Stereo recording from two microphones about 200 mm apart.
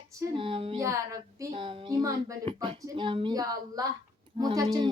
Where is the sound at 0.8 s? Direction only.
15° right (ahead or behind).